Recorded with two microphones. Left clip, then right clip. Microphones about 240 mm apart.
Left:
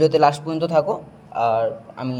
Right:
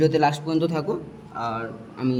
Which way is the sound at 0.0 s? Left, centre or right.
Centre.